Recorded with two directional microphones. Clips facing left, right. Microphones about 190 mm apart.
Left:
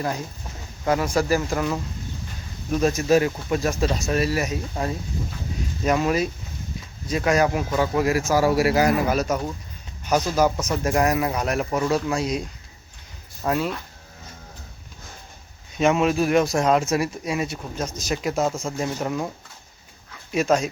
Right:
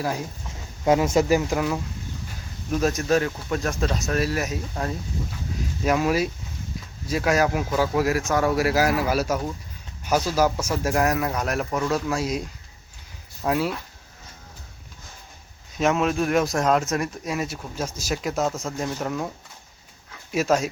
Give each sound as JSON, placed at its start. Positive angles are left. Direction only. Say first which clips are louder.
{"t": 0.0, "sound": "speech", "louder": "even", "side_deg": -10}
{"t": 0.9, "sound": "speech", "louder": "right 2 dB", "side_deg": -20}
{"t": 1.4, "sound": "speech", "louder": "even", "side_deg": -5}
{"t": 5.8, "sound": "speech", "louder": "even", "side_deg": -5}
{"t": 15.8, "sound": "speech", "louder": "left 2 dB", "side_deg": 0}
{"t": 20.3, "sound": "speech", "louder": "left 1 dB", "side_deg": -5}